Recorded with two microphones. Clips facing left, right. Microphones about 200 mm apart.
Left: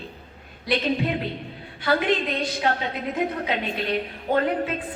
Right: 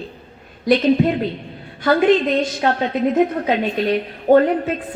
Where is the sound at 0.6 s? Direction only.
45° right (ahead or behind).